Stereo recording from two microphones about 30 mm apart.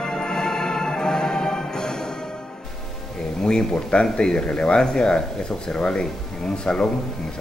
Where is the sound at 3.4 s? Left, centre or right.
Left.